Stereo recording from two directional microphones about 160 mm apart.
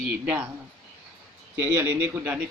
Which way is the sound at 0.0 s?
10° right (ahead or behind).